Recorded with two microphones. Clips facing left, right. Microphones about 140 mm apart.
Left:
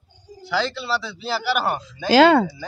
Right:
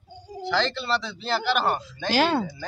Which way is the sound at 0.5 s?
5° left (ahead or behind).